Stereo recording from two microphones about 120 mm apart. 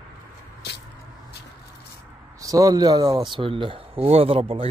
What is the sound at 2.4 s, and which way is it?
Speech, 30° right (ahead or behind).